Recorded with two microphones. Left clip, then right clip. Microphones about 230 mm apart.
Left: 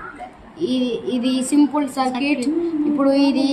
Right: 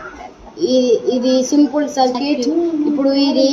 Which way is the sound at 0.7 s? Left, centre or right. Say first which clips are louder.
Right 9 dB; left.